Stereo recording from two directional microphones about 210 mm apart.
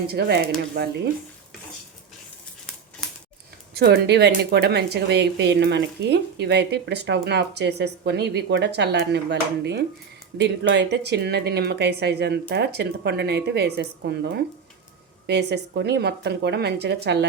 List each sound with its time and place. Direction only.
0.1 s a woman's voice: 50° right (ahead or behind)
3.8 s a woman's voice: 50° right (ahead or behind)